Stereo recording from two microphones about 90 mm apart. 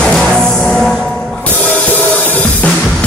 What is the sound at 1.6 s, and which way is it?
Drum kit, 20° left (ahead or behind).